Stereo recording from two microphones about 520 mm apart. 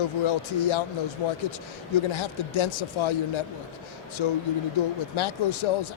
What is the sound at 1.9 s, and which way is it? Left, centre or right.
Speech, left.